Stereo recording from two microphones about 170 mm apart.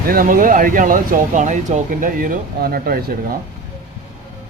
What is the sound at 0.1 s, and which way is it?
Speech, 55° right (ahead or behind).